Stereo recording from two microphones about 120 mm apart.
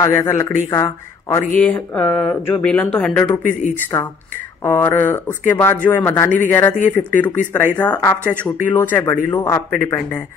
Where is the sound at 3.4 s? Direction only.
90° left.